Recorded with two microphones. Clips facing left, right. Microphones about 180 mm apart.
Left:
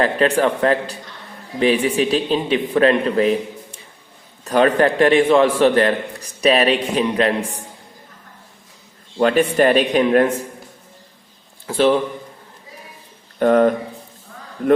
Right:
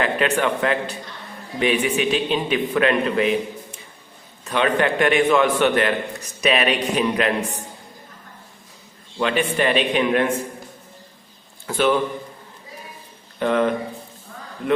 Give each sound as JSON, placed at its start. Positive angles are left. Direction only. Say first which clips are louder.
{"t": 0.0, "sound": "a man's voice", "louder": "left 4 dB", "side_deg": 35}
{"t": 9.1, "sound": "a man's voice", "louder": "left 6 dB", "side_deg": 40}
{"t": 11.6, "sound": "a man's voice", "louder": "left 4 dB", "side_deg": 30}
{"t": 13.4, "sound": "speech", "louder": "left 6 dB", "side_deg": 45}